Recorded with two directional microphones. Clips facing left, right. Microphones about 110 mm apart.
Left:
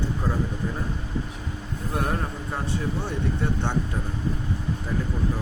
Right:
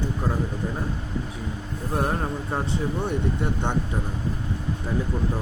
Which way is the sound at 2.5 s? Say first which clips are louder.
Even; 25° right (ahead or behind).